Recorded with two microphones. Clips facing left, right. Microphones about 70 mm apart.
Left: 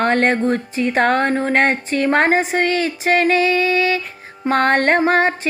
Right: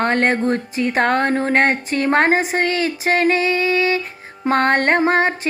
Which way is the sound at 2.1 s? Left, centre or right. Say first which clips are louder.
Even; right.